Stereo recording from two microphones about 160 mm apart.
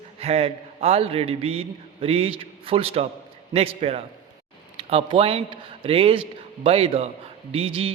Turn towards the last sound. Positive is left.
turn(degrees=-35)  # may be behind; listen again after turning